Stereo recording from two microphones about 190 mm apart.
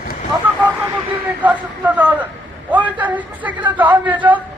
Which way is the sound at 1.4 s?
10° right (ahead or behind).